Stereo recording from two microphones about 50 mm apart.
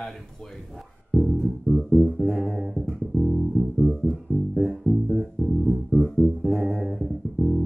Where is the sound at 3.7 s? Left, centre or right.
Centre.